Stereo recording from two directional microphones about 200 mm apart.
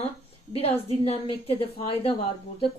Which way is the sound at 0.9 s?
30° left (ahead or behind).